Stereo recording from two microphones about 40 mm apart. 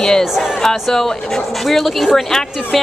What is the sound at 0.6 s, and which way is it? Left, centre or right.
A woman's voice, centre.